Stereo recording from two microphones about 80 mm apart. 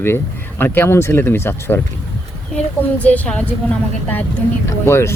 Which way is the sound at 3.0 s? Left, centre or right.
Centre.